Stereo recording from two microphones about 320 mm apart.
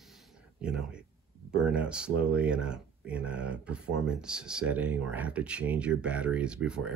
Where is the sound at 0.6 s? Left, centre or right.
Centre.